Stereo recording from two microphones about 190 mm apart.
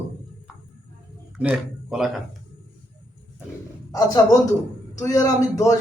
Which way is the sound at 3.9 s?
15° left (ahead or behind).